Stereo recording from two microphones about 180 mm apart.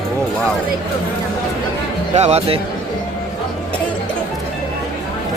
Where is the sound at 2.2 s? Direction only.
35° right (ahead or behind).